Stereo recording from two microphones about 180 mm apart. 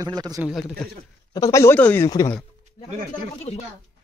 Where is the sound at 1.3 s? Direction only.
15° left (ahead or behind).